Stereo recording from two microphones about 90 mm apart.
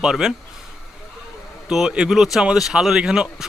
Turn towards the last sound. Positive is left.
turn(degrees=-5)  # may be behind; listen again after turning